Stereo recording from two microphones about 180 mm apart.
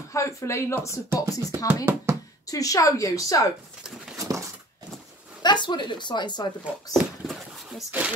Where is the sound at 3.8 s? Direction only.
5° right (ahead or behind).